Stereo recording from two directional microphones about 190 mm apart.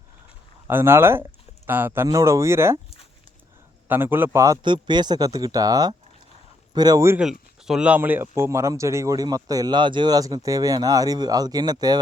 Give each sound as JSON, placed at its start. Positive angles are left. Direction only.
{"t": 0.7, "sound": "speech", "side_deg": -10}
{"t": 3.8, "sound": "speech", "side_deg": -10}
{"t": 7.3, "sound": "speech", "side_deg": 0}